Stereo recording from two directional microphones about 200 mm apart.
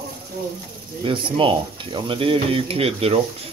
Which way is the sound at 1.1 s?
25° right (ahead or behind).